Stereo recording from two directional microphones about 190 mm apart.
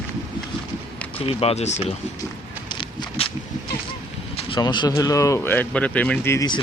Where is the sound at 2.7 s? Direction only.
30° left (ahead or behind).